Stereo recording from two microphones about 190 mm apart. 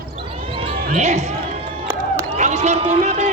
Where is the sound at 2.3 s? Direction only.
40° right (ahead or behind).